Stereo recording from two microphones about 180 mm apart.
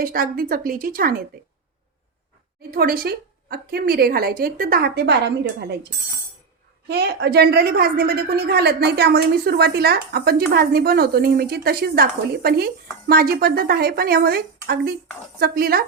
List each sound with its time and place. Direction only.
0.0 s a woman's voice: 55° right (ahead or behind)
2.6 s a woman's voice: 55° right (ahead or behind)
6.8 s a woman's voice: 65° right (ahead or behind)